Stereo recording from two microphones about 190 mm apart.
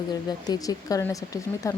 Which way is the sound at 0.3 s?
20° left (ahead or behind).